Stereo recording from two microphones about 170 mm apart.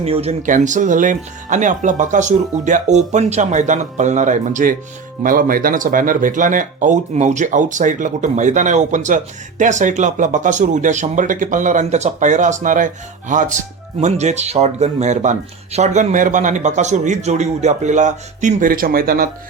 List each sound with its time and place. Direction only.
0.0 s speech: 35° right (ahead or behind); by 19.3 s 60° right (ahead or behind)